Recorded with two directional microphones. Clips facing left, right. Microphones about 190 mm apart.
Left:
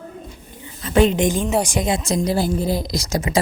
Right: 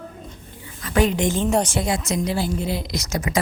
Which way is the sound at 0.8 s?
25° left (ahead or behind).